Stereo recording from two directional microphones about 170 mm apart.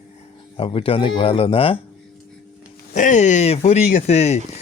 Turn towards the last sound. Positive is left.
turn(degrees=40)  # may be behind; listen again after turning